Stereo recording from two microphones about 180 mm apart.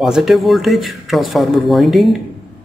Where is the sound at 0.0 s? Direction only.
Centre (ahead or behind).